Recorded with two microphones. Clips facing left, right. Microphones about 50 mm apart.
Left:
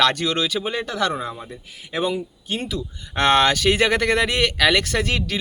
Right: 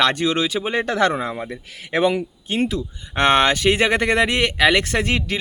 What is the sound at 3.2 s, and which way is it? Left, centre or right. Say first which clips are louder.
Speech: right 1 dB; right.